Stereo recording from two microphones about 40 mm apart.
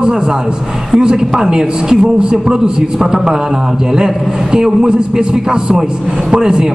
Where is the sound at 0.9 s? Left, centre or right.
Right.